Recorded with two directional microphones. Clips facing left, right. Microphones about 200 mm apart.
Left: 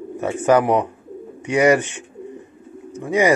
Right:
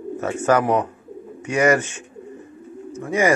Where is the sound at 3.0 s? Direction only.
15° left (ahead or behind).